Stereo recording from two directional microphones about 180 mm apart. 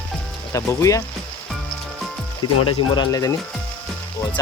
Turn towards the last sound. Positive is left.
turn(degrees=20)  # may be behind; listen again after turning